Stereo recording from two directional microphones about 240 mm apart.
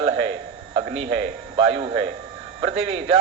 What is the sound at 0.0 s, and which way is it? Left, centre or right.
Music, right.